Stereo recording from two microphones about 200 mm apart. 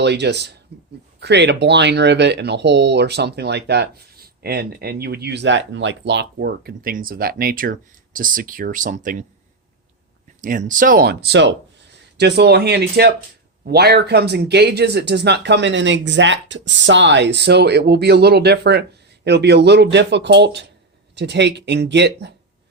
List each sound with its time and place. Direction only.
0.0 s speech: 60° right (ahead or behind); by 9.2 s 40° right (ahead or behind)
10.4 s speech: 40° right (ahead or behind); by 22.4 s 60° right (ahead or behind)